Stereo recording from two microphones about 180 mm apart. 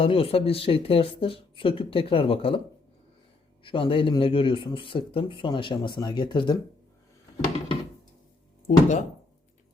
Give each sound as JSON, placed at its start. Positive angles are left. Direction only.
{"t": 0.0, "sound": "speech", "side_deg": 30}
{"t": 3.6, "sound": "speech", "side_deg": 30}
{"t": 8.6, "sound": "speech", "side_deg": 40}